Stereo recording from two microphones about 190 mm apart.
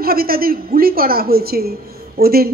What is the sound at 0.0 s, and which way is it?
A woman's voice, 50° right (ahead or behind).